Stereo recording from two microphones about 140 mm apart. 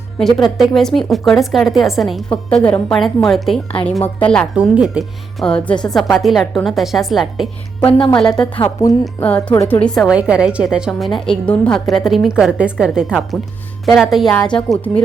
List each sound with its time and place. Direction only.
0.2 s a woman's voice: 5° left (ahead or behind)
4.5 s a woman's voice: 5° right (ahead or behind)
7.9 s speech: 40° left (ahead or behind)
8.2 s a woman's voice: 5° left (ahead or behind)
8.6 s speech: 25° left (ahead or behind)
9.2 s a woman's voice: 10° left (ahead or behind)
10.1 s a woman's voice: 5° right (ahead or behind)